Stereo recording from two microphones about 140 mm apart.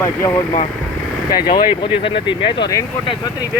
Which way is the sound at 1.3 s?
30° left (ahead or behind).